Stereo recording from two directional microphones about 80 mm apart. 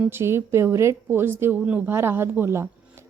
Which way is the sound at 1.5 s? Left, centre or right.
Centre.